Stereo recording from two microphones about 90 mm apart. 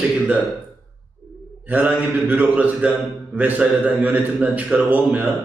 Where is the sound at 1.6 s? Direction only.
15° right (ahead or behind).